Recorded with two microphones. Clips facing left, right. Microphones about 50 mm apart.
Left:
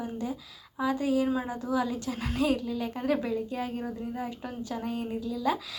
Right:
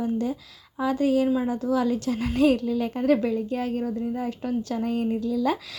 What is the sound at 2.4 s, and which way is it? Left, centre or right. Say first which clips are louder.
Speech: right 7 dB; right.